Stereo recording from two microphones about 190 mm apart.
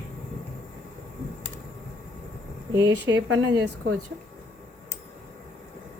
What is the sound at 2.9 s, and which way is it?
A woman's voice, 65° right (ahead or behind).